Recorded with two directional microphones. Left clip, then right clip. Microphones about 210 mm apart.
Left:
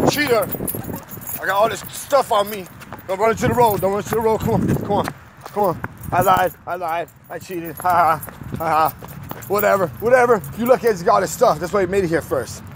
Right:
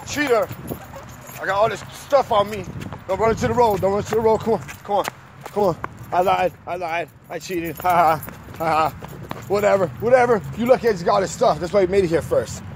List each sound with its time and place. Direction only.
0.0 s speech: 40° left (ahead or behind)
4.9 s speech: 25° left (ahead or behind)
7.2 s speech: 10° right (ahead or behind)
8.5 s speech: 20° left (ahead or behind)
9.5 s speech: 40° left (ahead or behind); by 12.4 s 25° left (ahead or behind)